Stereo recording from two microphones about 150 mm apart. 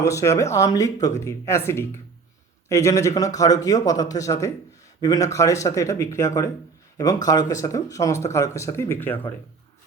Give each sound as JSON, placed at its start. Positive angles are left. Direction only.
{"t": 0.0, "sound": "a man's voice", "side_deg": 20}